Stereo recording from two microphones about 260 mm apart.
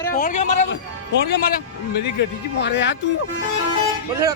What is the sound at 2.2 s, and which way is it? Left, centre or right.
Speech, left.